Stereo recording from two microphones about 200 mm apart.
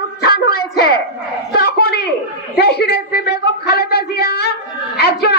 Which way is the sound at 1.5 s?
50° left (ahead or behind).